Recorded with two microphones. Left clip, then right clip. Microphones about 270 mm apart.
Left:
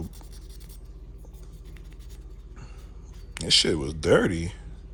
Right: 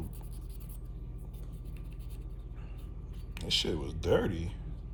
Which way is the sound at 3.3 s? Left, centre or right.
Left.